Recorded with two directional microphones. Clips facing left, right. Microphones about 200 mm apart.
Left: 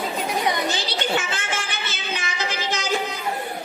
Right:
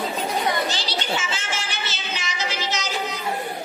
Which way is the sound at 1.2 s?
55° left (ahead or behind).